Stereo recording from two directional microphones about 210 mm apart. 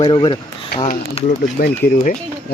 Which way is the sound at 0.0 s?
20° left (ahead or behind).